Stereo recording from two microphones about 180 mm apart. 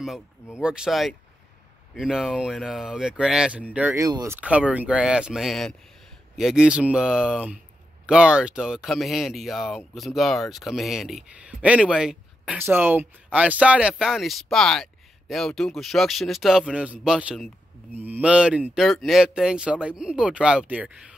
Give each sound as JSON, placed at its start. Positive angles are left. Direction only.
{"t": 0.6, "sound": "speech", "side_deg": -5}
{"t": 4.0, "sound": "speech", "side_deg": -20}
{"t": 4.4, "sound": "speech", "side_deg": -5}